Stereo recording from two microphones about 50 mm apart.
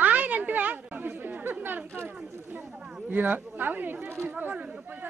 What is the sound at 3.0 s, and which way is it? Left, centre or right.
A woman's voice, right.